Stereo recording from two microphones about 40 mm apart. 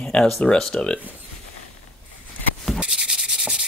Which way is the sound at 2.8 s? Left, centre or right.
Right.